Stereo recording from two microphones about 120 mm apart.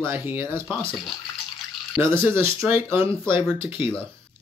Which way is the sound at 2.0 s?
20° right (ahead or behind).